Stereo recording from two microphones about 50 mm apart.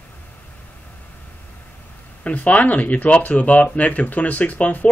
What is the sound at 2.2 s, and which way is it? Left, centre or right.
Speech, left.